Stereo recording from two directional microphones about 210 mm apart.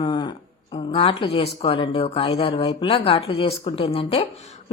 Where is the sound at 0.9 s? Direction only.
25° left (ahead or behind).